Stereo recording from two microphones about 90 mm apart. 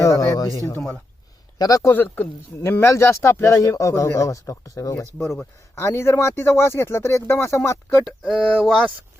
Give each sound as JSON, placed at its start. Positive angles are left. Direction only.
{"t": 0.0, "sound": "a sound", "side_deg": 40}
{"t": 1.5, "sound": "speech", "side_deg": 45}
{"t": 1.9, "sound": "speech", "side_deg": 20}
{"t": 8.2, "sound": "speech", "side_deg": 0}